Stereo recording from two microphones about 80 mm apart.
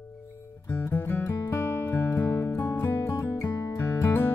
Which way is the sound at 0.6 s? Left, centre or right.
Left.